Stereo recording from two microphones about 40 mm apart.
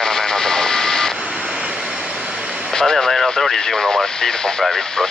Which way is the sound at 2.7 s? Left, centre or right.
Centre.